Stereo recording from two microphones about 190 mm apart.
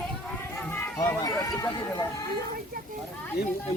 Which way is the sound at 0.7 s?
15° left (ahead or behind).